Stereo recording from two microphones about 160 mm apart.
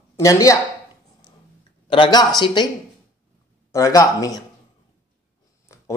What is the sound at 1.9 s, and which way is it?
Speech, 30° left (ahead or behind).